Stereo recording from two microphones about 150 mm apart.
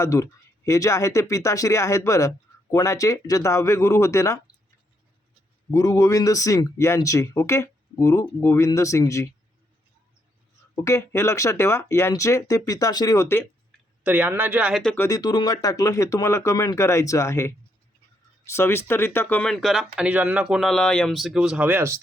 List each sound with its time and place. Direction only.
0.0 s speech: 20° left (ahead or behind)
5.7 s speech: 20° left (ahead or behind)
10.8 s speech: 20° left (ahead or behind)
14.0 s speech: 10° right (ahead or behind)
14.9 s speech: 20° left (ahead or behind)
19.5 s speech: centre (ahead or behind)